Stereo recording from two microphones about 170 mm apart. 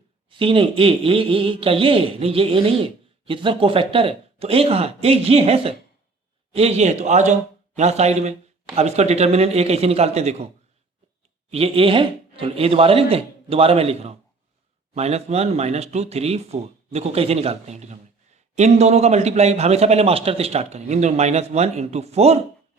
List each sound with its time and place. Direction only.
0.3 s speech: 30° right (ahead or behind)
11.5 s speech: 35° right (ahead or behind)